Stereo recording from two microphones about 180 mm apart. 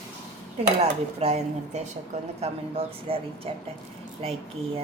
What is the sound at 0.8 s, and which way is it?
Speech, 35° right (ahead or behind).